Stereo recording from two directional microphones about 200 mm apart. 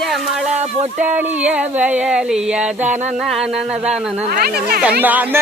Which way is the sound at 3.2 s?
Centre (ahead or behind).